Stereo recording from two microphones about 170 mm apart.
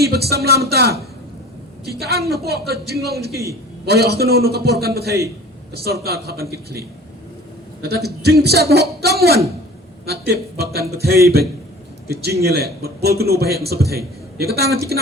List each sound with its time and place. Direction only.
0.0 s a man's voice: 70° right (ahead or behind)